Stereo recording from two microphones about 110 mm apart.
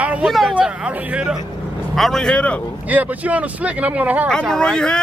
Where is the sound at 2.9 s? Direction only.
15° right (ahead or behind).